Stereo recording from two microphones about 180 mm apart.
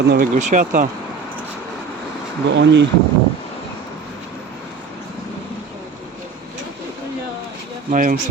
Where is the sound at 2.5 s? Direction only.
80° right.